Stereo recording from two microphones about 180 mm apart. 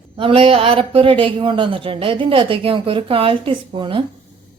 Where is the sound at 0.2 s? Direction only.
30° right (ahead or behind).